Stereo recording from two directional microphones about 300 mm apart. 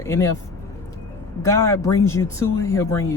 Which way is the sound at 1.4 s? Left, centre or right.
Centre.